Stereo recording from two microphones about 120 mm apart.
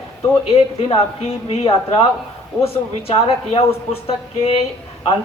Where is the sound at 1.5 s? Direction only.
55° left (ahead or behind).